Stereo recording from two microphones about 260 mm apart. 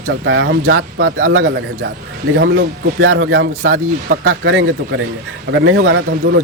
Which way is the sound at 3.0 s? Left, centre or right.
Right.